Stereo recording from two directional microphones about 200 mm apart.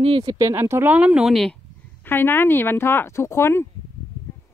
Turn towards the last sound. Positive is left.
turn(degrees=10)  # may be behind; listen again after turning